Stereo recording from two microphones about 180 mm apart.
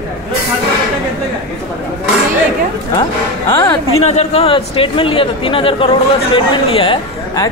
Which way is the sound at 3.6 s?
35° left (ahead or behind).